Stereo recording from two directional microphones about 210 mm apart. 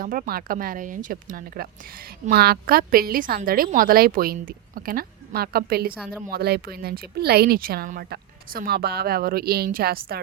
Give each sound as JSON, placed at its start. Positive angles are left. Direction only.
{"t": 0.0, "sound": "speech", "side_deg": -40}